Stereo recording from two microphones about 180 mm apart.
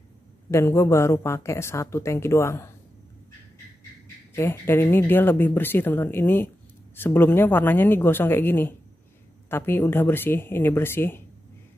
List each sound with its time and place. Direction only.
0.5 s speech: 15° left (ahead or behind)
4.4 s speech: 10° left (ahead or behind)